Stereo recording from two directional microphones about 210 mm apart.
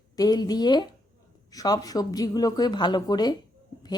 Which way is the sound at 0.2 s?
20° left (ahead or behind).